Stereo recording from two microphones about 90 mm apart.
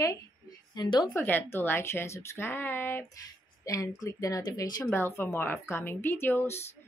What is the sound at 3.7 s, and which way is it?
Speech, 40° left (ahead or behind).